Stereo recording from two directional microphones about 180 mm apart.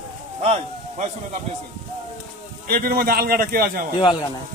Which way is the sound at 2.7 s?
55° right (ahead or behind).